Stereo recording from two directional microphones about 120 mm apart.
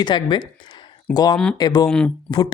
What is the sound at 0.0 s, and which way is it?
Speech, 40° left (ahead or behind).